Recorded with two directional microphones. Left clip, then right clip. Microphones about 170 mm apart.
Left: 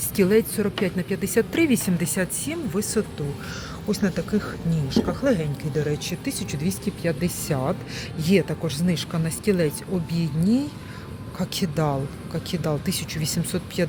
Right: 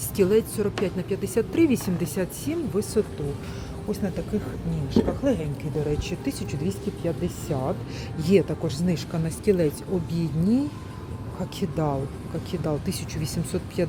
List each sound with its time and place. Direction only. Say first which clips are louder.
0.2 s speech: left 1 dB; 5° left (ahead or behind)
3.9 s speech: left 4 dB; 20° left (ahead or behind)
6.1 s speech: left 1 dB; centre (ahead or behind)
8.2 s speech: right 1 dB; 5° right (ahead or behind)
11.3 s speech: left 3 dB; 5° left (ahead or behind)